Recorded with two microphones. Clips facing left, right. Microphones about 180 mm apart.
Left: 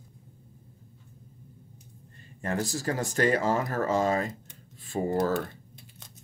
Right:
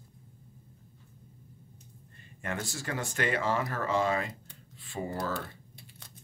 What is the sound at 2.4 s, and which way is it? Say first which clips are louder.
Speech: left 7 dB; 35° left (ahead or behind).